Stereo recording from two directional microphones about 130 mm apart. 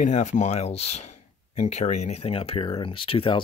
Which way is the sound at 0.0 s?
70° left (ahead or behind).